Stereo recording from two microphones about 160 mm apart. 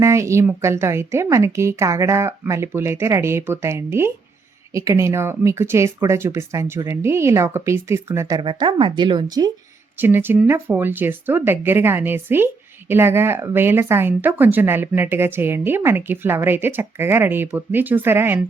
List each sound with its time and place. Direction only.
0.0 s speech: 20° right (ahead or behind)
8.4 s speech: 30° right (ahead or behind)
10.0 s speech: 15° right (ahead or behind)